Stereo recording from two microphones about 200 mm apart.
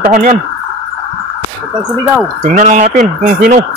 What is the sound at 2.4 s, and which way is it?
Speech, 40° right (ahead or behind).